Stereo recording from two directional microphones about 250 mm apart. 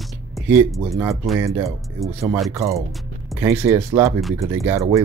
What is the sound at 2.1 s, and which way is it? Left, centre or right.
Speech, right.